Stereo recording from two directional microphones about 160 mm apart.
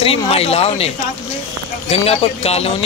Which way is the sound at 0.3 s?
40° left (ahead or behind).